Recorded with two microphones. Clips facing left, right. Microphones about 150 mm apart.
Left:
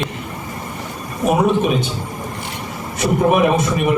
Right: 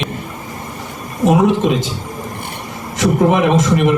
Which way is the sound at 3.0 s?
90° right.